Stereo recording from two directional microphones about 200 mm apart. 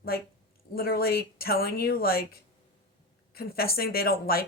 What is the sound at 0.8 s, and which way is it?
Speech, 50° left (ahead or behind).